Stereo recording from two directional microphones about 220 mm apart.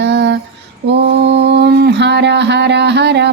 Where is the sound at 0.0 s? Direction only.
50° right (ahead or behind).